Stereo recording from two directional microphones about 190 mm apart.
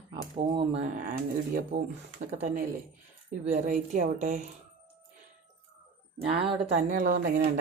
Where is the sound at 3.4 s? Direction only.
35° right (ahead or behind).